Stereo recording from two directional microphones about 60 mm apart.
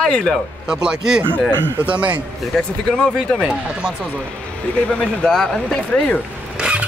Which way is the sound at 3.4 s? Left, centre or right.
Centre.